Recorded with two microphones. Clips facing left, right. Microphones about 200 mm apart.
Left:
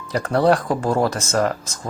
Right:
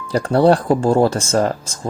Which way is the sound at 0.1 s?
30° right (ahead or behind).